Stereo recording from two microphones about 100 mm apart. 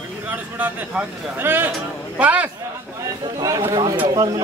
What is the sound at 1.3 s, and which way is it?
A man's voice, 20° right (ahead or behind).